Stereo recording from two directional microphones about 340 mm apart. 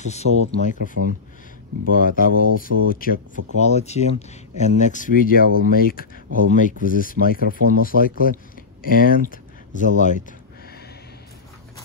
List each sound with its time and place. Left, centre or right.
0.0 s speech: centre